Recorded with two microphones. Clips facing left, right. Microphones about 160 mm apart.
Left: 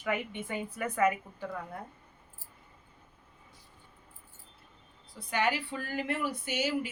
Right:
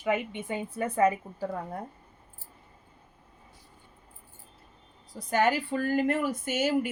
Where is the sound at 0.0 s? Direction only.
20° right (ahead or behind); by 1.8 s 35° right (ahead or behind).